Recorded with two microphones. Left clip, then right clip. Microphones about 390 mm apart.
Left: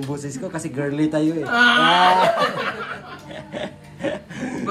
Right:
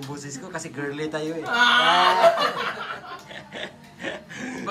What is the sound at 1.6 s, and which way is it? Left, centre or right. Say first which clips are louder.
Speech: left 3 dB; right.